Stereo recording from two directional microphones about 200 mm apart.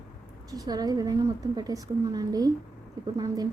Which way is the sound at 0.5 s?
20° right (ahead or behind).